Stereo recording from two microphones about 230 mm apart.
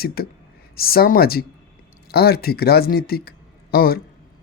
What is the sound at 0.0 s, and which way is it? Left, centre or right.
Speech, left.